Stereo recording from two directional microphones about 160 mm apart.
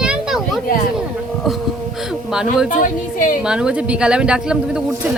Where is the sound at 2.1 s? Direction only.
5° right (ahead or behind).